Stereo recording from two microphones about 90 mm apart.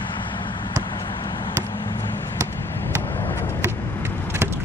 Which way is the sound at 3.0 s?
30° left (ahead or behind).